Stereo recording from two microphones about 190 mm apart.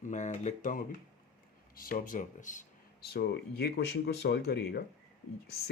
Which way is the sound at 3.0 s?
55° left (ahead or behind).